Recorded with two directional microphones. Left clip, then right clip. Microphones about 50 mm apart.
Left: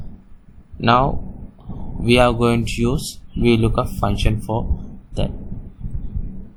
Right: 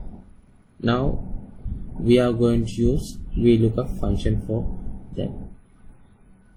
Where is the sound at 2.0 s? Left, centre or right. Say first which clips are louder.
Left 4 dB; left.